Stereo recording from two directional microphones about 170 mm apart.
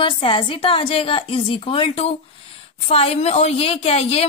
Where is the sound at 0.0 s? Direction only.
30° left (ahead or behind).